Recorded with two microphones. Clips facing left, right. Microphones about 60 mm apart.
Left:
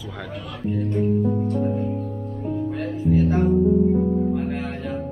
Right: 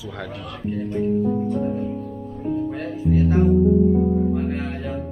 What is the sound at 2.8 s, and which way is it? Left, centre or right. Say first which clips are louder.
Music: left 3 dB; centre.